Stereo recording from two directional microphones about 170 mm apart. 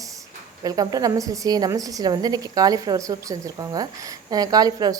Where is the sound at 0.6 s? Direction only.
20° right (ahead or behind).